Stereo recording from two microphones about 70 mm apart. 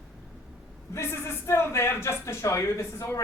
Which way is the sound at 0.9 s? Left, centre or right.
Left.